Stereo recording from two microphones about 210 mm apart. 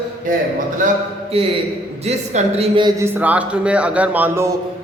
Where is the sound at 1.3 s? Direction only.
25° right (ahead or behind).